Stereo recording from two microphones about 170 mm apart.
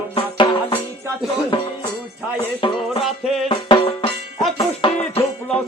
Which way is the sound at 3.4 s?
30° left (ahead or behind).